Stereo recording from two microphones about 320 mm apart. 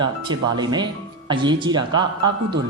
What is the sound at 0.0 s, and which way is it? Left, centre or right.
Speech, centre.